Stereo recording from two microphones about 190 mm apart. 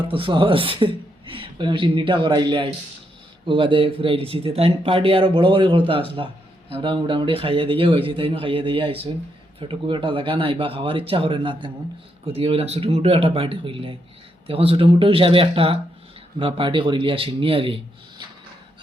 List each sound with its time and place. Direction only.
0.1 s speech: 25° right (ahead or behind)